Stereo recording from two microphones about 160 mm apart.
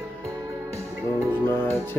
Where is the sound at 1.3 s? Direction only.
15° left (ahead or behind).